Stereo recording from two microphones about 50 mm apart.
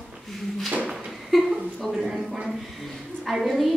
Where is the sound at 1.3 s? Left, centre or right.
Centre.